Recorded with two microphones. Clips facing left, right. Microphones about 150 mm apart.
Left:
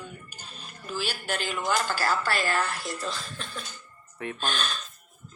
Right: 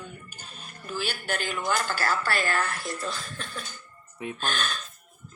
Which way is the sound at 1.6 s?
5° left (ahead or behind).